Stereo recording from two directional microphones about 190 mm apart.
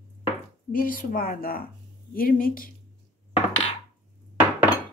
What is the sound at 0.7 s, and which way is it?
A woman's voice, 45° left (ahead or behind).